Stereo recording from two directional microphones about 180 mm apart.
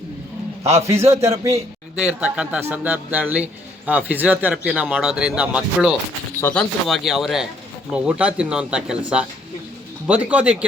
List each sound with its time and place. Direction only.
0.9 s speech: 15° right (ahead or behind)
6.4 s speech: 5° left (ahead or behind)